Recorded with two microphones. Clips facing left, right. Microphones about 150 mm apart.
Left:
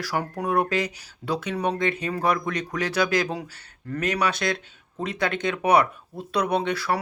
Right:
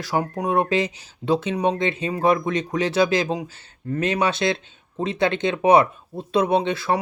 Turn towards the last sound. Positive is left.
turn(degrees=-20)  # may be behind; listen again after turning